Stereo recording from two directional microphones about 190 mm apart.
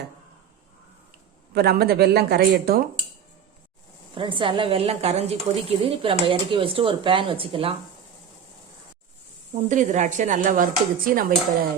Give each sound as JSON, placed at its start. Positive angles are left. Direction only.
{"t": 1.5, "sound": "speech", "side_deg": -55}
{"t": 4.1, "sound": "a woman's voice", "side_deg": -25}
{"t": 9.6, "sound": "speech", "side_deg": -40}